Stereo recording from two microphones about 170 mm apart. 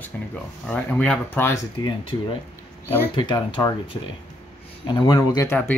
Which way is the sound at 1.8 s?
30° left (ahead or behind).